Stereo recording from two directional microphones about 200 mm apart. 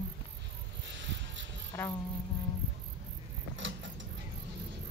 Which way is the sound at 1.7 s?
10° left (ahead or behind).